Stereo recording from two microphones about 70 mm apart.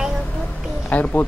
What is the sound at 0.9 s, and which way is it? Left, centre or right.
Speech, left.